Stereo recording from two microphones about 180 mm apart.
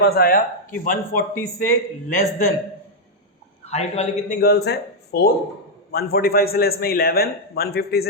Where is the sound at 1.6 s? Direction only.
50° left (ahead or behind).